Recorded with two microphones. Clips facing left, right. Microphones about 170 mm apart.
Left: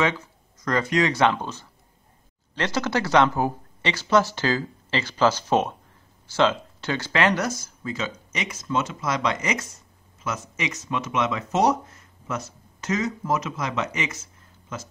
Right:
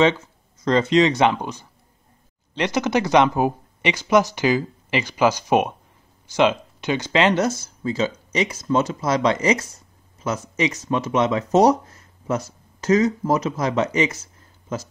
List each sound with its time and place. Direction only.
0.0 s speech: 25° right (ahead or behind)